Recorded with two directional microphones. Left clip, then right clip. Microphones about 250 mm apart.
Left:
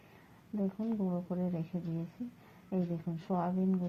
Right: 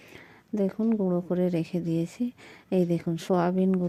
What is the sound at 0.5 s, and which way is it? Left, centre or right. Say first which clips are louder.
A woman's voice: right 10 dB; right.